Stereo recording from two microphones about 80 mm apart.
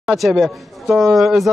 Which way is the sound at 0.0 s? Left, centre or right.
Centre.